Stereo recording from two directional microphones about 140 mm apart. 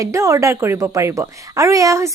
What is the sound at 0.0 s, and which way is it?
A woman's voice, 20° right (ahead or behind).